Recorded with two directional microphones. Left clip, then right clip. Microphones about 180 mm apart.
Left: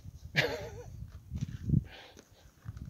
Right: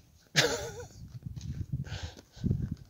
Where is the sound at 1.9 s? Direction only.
45° right (ahead or behind).